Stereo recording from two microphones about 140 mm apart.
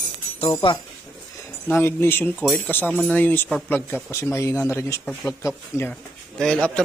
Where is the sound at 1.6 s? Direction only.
15° left (ahead or behind).